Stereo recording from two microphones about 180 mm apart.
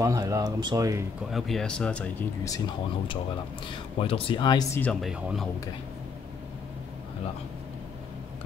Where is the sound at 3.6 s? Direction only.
30° left (ahead or behind).